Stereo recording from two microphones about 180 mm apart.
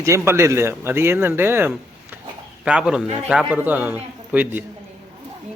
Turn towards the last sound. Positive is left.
turn(degrees=-10)  # may be behind; listen again after turning